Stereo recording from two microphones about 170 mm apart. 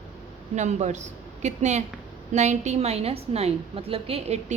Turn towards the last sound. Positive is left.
turn(degrees=-35)  # may be behind; listen again after turning